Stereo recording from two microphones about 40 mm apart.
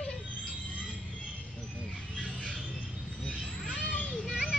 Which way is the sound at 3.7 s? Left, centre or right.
Left.